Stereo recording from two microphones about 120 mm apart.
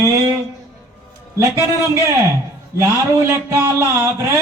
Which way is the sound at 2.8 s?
20° right (ahead or behind).